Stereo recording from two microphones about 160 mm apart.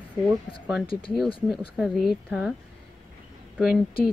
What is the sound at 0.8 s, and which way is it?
Speech, 30° left (ahead or behind).